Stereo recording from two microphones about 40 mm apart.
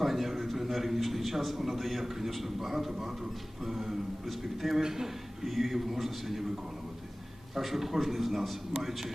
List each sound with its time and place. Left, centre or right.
0.0 s a man's voice: centre
7.5 s a man's voice: centre